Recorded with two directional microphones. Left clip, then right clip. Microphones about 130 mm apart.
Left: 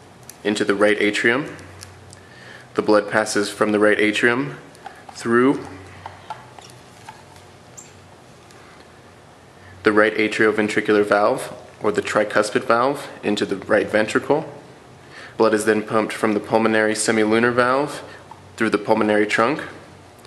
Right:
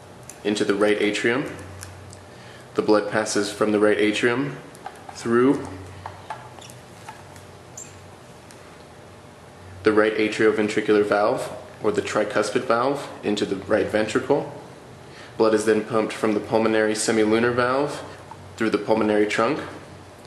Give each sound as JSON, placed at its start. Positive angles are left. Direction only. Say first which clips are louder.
{"t": 0.4, "sound": "speech", "louder": "left 3 dB", "side_deg": 20}
{"t": 2.7, "sound": "speech", "louder": "left 3 dB", "side_deg": 20}
{"t": 9.8, "sound": "speech", "louder": "left 3 dB", "side_deg": 20}